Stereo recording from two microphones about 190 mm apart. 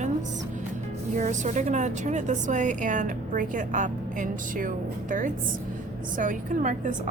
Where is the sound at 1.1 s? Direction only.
40° right (ahead or behind).